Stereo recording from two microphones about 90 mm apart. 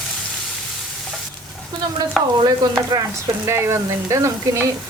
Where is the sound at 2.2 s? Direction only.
Centre (ahead or behind).